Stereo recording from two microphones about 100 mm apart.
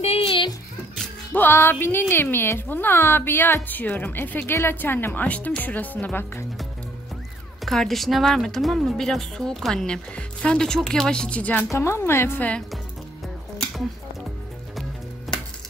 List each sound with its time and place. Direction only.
0.0 s a sound: 85° left
1.3 s speech: 20° left (ahead or behind)
7.6 s speech: 5° left (ahead or behind)
11.7 s speech: 25° left (ahead or behind)
15.3 s music: centre (ahead or behind)